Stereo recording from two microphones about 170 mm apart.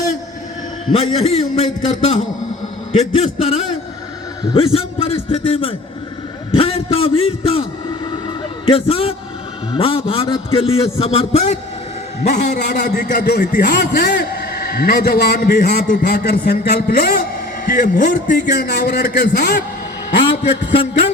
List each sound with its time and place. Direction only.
0.9 s a man's voice: 35° left (ahead or behind)
12.5 s a man's voice: 75° left (ahead or behind)
13.2 s a man's voice: 65° left (ahead or behind)